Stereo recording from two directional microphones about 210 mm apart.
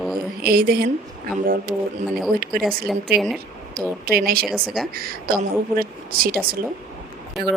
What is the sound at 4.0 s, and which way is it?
Speech, 45° right (ahead or behind).